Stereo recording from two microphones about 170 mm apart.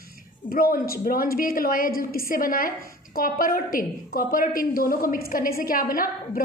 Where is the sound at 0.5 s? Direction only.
55° left (ahead or behind).